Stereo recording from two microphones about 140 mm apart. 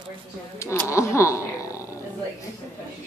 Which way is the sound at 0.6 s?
20° left (ahead or behind).